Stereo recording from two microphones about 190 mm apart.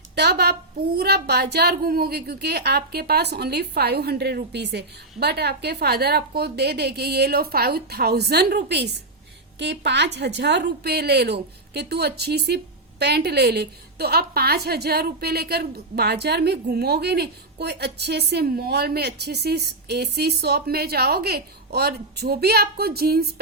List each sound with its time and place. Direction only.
0.2 s a woman's voice: 60° right (ahead or behind)